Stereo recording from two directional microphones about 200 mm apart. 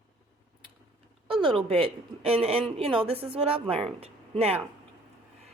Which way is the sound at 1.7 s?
30° right (ahead or behind).